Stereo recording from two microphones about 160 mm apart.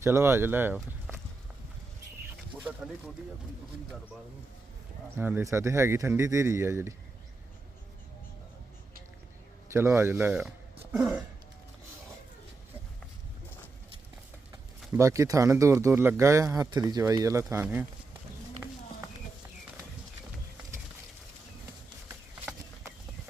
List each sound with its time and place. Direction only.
0.0 s speech: 15° right (ahead or behind)
2.6 s speech: 5° right (ahead or behind)
5.1 s speech: 15° right (ahead or behind)
9.7 s speech: 15° right (ahead or behind)
10.9 s a sound: 5° right (ahead or behind)
14.9 s speech: 20° right (ahead or behind)